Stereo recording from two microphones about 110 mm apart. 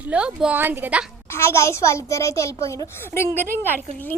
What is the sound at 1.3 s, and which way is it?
A child's voice, 25° left (ahead or behind).